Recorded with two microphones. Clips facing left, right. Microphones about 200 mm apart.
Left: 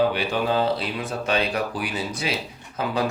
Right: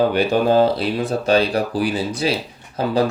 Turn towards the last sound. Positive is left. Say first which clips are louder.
# right 6 dB
turn(degrees=-35)  # may be behind; listen again after turning